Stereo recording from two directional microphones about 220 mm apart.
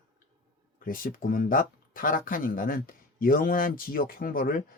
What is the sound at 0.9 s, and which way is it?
Speech, 40° left (ahead or behind).